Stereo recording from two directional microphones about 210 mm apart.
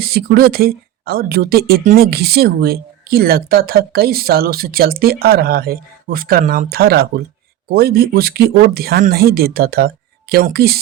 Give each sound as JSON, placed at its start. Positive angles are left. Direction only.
{"t": 0.0, "sound": "speech", "side_deg": -50}